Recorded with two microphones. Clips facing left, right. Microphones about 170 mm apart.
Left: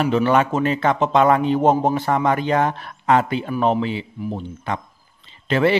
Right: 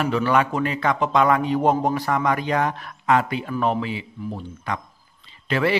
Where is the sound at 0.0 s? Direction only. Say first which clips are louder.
Left 3 dB; 25° left (ahead or behind).